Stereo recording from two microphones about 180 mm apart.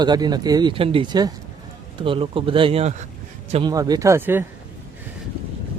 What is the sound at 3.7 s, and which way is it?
Speech, 20° right (ahead or behind).